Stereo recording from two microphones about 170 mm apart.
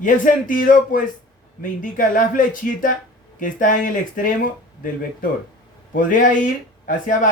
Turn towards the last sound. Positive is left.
turn(degrees=50)  # may be behind; listen again after turning